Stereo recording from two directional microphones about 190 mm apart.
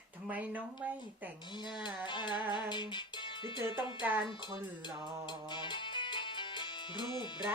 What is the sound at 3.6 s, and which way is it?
Speech, 10° right (ahead or behind).